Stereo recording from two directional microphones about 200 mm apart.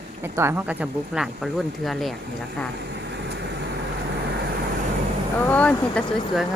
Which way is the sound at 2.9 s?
60° right (ahead or behind).